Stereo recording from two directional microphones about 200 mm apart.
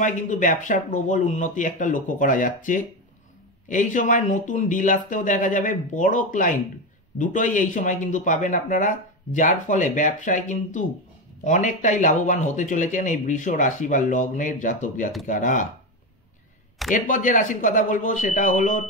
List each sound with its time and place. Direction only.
0.0 s a man's voice: 40° left (ahead or behind)
16.9 s a man's voice: 40° left (ahead or behind)